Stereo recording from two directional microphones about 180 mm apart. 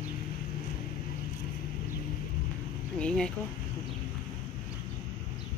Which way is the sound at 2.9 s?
5° left (ahead or behind).